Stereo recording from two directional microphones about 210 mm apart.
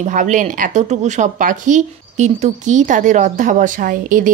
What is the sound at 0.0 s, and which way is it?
Speech, 35° right (ahead or behind).